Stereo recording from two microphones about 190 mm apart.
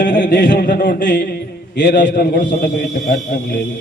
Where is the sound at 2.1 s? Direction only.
45° left (ahead or behind).